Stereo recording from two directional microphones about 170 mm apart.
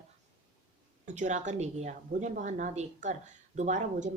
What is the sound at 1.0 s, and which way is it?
A woman's voice, 45° right (ahead or behind).